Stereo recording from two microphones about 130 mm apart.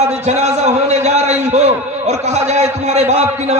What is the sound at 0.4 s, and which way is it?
A man's voice, 60° right (ahead or behind).